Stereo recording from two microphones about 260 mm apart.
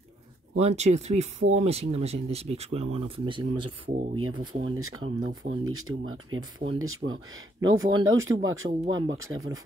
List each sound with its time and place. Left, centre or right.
0.6 s speech: right
4.2 s speech: right